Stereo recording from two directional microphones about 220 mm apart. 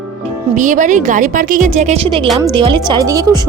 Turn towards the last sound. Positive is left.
turn(degrees=-15)  # may be behind; listen again after turning